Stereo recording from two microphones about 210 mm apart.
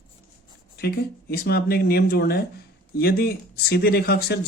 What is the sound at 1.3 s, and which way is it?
Speech, 45° left (ahead or behind).